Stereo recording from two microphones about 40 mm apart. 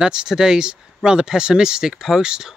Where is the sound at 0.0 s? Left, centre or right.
Centre.